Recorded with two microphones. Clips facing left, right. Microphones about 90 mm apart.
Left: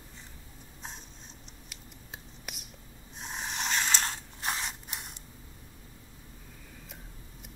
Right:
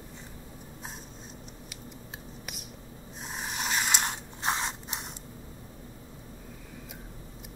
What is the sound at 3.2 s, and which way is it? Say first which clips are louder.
Mechanisms: right 1 dB; 5° right (ahead or behind).